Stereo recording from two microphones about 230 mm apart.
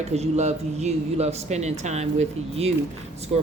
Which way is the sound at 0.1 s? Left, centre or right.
Right.